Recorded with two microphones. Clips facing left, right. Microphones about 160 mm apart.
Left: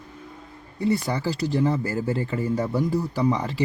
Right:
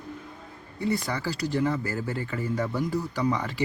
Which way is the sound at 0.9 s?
30° left (ahead or behind).